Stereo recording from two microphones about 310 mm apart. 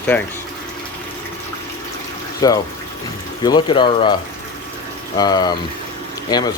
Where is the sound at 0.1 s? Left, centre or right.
Centre.